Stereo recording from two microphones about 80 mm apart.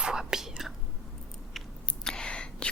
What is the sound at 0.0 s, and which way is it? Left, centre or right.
Whispering, centre.